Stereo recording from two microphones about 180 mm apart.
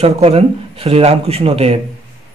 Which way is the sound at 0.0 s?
35° right (ahead or behind).